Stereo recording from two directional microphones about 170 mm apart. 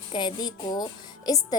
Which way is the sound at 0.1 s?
25° left (ahead or behind).